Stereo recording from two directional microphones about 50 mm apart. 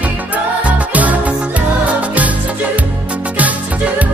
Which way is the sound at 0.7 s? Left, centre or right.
Right.